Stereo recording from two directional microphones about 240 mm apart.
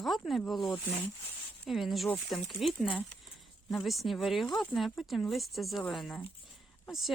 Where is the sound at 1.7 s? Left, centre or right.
Centre.